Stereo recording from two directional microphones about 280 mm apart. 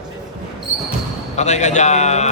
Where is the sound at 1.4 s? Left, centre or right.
Left.